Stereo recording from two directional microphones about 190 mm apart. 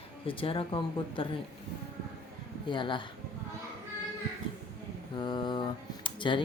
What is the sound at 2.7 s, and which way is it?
Speech, 25° left (ahead or behind).